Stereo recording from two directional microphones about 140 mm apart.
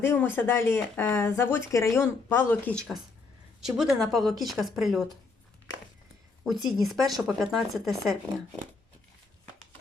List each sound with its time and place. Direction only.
0.0 s speech: 15° left (ahead or behind); by 5.0 s centre (ahead or behind)
6.4 s speech: centre (ahead or behind)